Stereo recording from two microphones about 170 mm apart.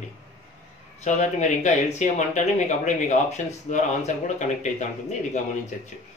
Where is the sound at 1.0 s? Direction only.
45° left (ahead or behind).